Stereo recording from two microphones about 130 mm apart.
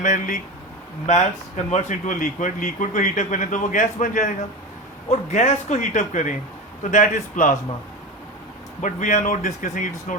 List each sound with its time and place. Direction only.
0.0 s a man's voice: 70° left (ahead or behind)
5.3 s a man's voice: 65° left (ahead or behind)
8.8 s a man's voice: 70° left (ahead or behind)